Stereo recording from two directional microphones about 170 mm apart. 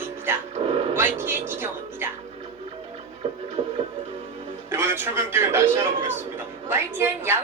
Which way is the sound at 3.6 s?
30° right (ahead or behind).